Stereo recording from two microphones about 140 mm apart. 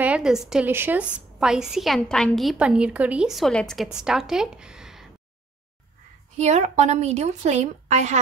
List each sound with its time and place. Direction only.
0.0 s a woman's voice: 5° right (ahead or behind)
0.7 s speech: 15° right (ahead or behind); by 2.5 s 5° left (ahead or behind)
2.5 s speech: 10° right (ahead or behind)
6.3 s a woman's voice: 55° right (ahead or behind)